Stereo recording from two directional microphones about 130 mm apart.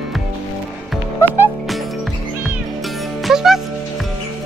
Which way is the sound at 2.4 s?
Centre (ahead or behind).